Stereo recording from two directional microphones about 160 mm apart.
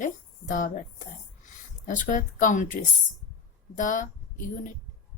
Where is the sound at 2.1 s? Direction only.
55° left (ahead or behind).